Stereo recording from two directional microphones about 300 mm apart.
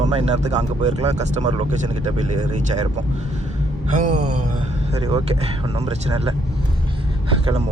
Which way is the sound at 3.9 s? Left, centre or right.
Right.